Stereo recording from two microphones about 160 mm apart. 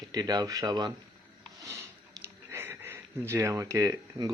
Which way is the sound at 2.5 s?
15° right (ahead or behind).